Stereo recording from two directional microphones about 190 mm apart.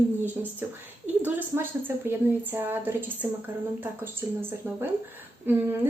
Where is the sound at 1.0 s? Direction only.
10° right (ahead or behind).